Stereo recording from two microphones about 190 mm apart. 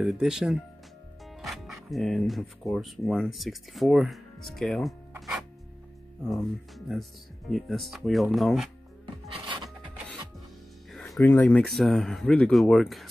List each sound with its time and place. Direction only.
0.0 s speech: centre (ahead or behind)
6.2 s speech: centre (ahead or behind)
9.0 s filing: 25° right (ahead or behind)
10.9 s music: centre (ahead or behind)
11.2 s speech: 10° left (ahead or behind)